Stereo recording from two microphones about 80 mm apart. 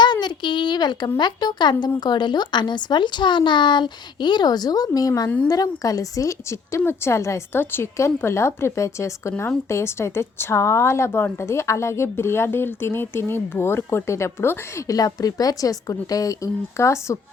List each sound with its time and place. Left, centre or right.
0.0 s a sound: left
1.2 s speech: left
14.8 s a woman's voice: left